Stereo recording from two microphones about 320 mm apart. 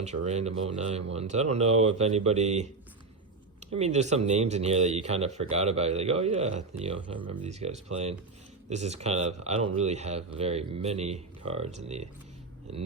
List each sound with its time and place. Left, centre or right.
0.0 s speech: right